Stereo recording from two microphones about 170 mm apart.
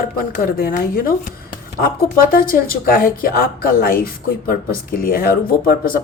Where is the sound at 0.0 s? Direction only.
55° left (ahead or behind).